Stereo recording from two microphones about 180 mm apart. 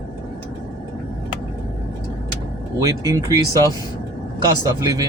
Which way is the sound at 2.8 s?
20° right (ahead or behind).